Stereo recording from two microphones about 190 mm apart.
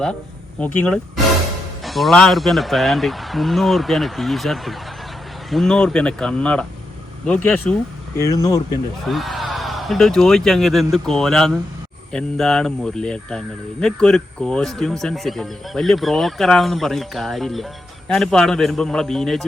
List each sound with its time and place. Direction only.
0.6 s a man's voice: 5° left (ahead or behind)
9.0 s a man's voice: centre (ahead or behind)